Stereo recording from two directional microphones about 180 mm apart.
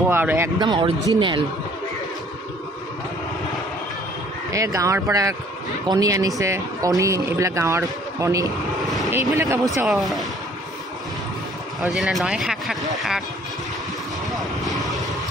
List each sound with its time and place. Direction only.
0.1 s speech: 10° right (ahead or behind)
0.6 s speech: 25° right (ahead or behind)
4.5 s speech: 15° right (ahead or behind)
9.8 s speech: centre (ahead or behind)
11.8 s speech: centre (ahead or behind)
14.3 s vehicle: centre (ahead or behind)